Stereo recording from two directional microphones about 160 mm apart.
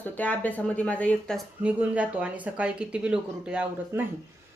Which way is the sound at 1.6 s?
10° right (ahead or behind).